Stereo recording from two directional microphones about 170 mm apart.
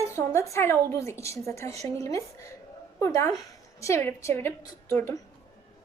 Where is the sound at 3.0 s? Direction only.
15° left (ahead or behind).